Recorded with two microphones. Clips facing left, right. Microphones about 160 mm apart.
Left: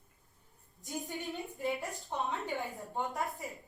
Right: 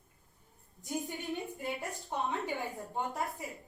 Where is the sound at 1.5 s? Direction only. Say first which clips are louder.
Left 2 dB; centre (ahead or behind).